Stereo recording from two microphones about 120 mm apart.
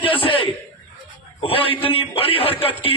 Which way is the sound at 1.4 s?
50° left (ahead or behind).